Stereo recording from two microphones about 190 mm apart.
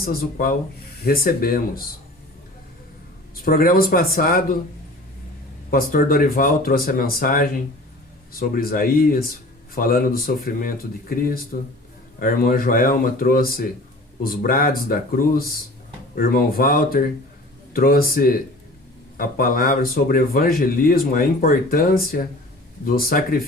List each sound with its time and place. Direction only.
0.0 s speech: 50° left (ahead or behind)
3.4 s speech: 50° left (ahead or behind)
5.7 s speech: 50° left (ahead or behind)